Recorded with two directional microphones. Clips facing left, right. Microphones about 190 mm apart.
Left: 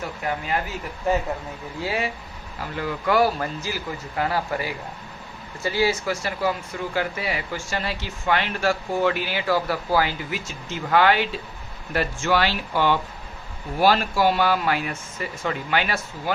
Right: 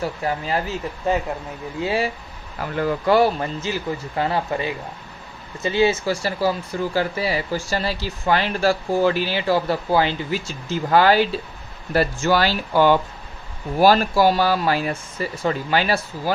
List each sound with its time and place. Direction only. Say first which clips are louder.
0.0 s speech: right 4 dB; 30° right (ahead or behind)
1.8 s speech: right 4 dB; 25° right (ahead or behind)
3.1 s speech: right 2 dB; 25° right (ahead or behind)